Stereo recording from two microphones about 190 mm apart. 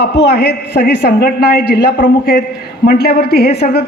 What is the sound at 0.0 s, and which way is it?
A woman's voice, 60° left (ahead or behind).